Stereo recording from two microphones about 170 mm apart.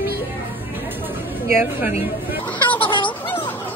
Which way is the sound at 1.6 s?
10° right (ahead or behind).